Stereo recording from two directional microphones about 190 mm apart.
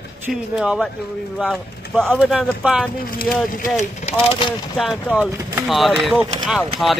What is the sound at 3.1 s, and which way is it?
Speech, 45° left (ahead or behind).